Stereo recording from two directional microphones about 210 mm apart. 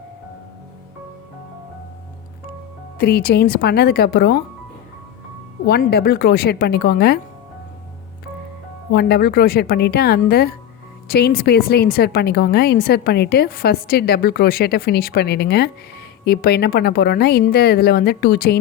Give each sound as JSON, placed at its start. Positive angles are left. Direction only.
{"t": 3.0, "sound": "a woman's voice", "side_deg": 50}
{"t": 5.6, "sound": "a woman's voice", "side_deg": 50}
{"t": 8.9, "sound": "a woman's voice", "side_deg": 50}